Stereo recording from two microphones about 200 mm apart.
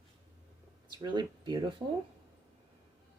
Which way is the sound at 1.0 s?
20° right (ahead or behind).